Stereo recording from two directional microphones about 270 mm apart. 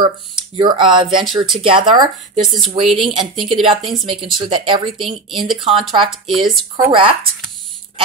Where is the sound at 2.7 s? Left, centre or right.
Centre.